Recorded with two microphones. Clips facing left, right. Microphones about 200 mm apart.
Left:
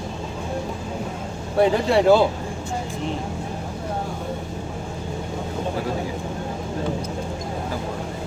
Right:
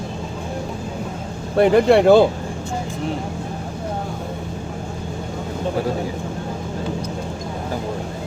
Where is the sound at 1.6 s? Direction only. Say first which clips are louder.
Right 5 dB; 60° right (ahead or behind).